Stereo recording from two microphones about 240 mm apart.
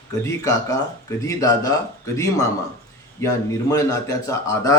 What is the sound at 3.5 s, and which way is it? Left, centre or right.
A man's voice, centre.